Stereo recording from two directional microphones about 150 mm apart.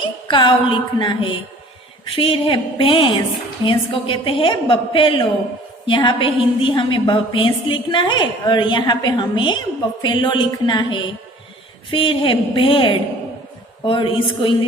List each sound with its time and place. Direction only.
0.3 s a woman's voice: 30° left (ahead or behind)